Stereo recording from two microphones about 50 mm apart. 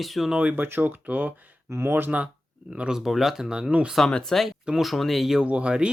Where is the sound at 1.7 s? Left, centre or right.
Right.